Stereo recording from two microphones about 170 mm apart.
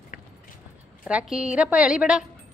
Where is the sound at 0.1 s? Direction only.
50° left (ahead or behind).